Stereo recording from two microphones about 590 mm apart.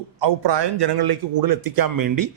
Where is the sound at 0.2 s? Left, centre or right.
Right.